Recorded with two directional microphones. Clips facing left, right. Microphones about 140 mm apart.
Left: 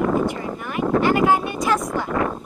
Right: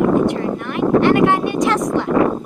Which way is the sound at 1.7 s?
90° right.